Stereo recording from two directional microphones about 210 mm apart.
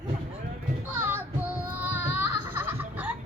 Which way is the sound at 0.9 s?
10° right (ahead or behind).